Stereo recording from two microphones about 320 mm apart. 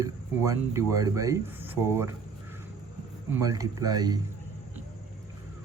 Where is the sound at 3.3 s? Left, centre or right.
Centre.